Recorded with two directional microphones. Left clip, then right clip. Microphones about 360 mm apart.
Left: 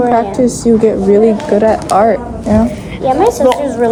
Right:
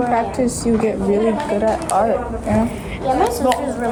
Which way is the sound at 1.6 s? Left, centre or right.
Left.